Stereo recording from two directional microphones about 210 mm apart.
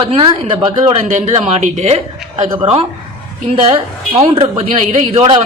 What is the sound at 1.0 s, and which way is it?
A woman's voice, 35° right (ahead or behind).